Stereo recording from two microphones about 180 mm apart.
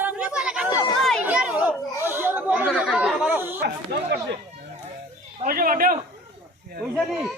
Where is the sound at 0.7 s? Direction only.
20° left (ahead or behind).